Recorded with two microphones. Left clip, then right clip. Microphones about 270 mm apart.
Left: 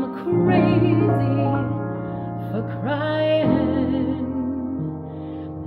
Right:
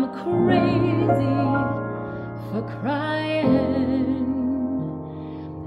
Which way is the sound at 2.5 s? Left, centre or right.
Right.